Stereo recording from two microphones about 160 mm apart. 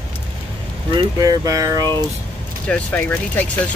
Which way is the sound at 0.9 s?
25° right (ahead or behind).